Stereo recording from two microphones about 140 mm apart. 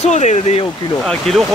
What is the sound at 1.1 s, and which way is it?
Speech, centre (ahead or behind).